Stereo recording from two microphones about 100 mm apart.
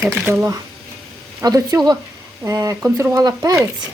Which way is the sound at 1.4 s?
35° right (ahead or behind).